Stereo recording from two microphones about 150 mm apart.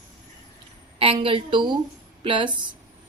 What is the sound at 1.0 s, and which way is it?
Speech, 35° right (ahead or behind).